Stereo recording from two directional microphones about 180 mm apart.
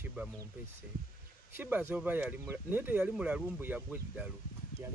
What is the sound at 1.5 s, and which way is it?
Speech, 10° right (ahead or behind).